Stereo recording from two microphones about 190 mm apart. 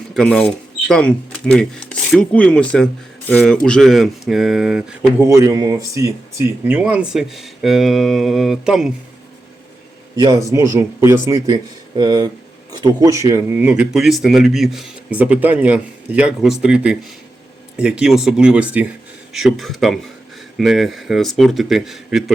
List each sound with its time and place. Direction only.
0.1 s speech: 5° left (ahead or behind)
5.2 s speech: 15° right (ahead or behind)
10.2 s speech: 20° right (ahead or behind); by 22.2 s centre (ahead or behind)